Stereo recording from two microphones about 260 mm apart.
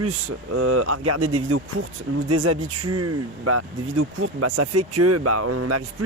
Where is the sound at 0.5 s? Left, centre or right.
Right.